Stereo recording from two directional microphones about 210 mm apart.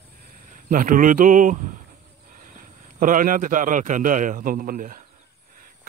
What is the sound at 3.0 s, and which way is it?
A man's voice, 40° right (ahead or behind).